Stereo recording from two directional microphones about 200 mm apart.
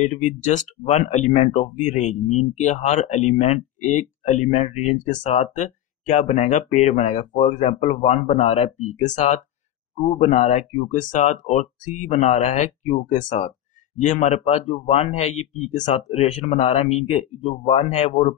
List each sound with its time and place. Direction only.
0.0 s speech: 40° left (ahead or behind)